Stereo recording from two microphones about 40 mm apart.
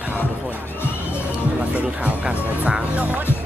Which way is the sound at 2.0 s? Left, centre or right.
Right.